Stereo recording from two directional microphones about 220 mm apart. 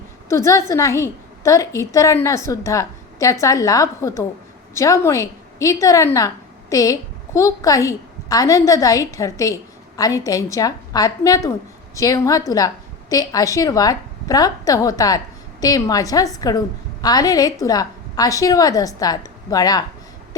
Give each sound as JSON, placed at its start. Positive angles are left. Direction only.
{"t": 0.3, "sound": "a woman's voice", "side_deg": 15}